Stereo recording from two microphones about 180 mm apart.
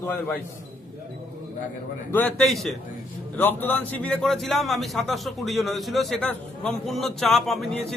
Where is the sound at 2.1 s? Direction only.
5° left (ahead or behind).